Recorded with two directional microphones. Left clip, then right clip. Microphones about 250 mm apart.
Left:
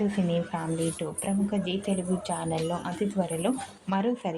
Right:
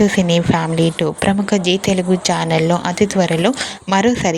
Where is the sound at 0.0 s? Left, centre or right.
Right.